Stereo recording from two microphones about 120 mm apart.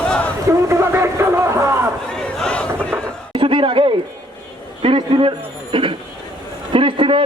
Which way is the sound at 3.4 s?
45° right (ahead or behind).